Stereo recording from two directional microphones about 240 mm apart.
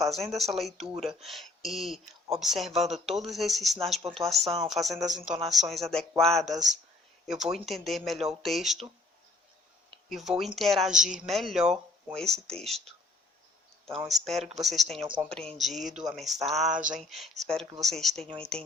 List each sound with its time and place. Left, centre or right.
0.0 s speech: centre
10.1 s speech: centre
13.9 s speech: centre
16.7 s speech: right
17.0 s speech: centre